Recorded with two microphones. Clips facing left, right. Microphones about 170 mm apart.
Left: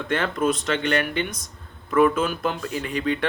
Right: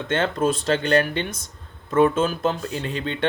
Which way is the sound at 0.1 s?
25° right (ahead or behind).